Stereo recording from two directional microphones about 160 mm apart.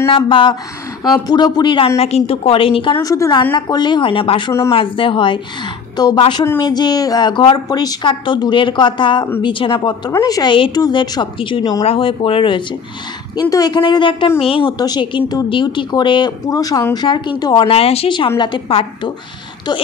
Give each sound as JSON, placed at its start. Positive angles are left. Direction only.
{"t": 0.1, "sound": "a woman's voice", "side_deg": 30}
{"t": 3.0, "sound": "a woman's voice", "side_deg": 20}